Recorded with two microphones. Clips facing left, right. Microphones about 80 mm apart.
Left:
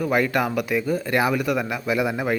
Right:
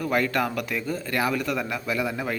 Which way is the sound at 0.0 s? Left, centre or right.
Centre.